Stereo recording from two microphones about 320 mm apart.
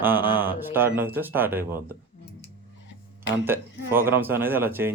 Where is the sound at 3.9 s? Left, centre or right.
Centre.